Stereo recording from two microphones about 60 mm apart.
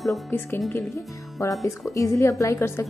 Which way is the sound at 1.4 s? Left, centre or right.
Left.